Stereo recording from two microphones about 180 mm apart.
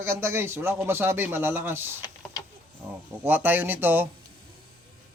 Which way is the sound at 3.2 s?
10° right (ahead or behind).